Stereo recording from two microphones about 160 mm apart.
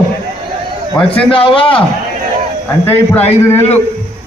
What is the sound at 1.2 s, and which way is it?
Speech, 35° left (ahead or behind).